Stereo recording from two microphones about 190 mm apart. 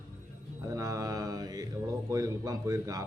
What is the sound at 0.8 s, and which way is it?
A man's voice, 20° right (ahead or behind).